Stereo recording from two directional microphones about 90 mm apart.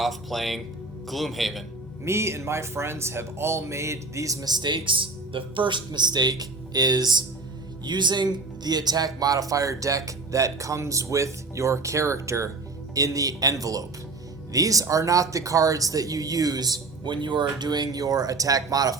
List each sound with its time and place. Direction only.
0.0 s speech: centre (ahead or behind)
2.0 s speech: 30° right (ahead or behind)